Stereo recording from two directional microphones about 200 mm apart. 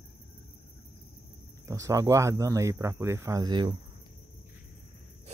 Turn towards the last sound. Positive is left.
turn(degrees=-20)  # may be behind; listen again after turning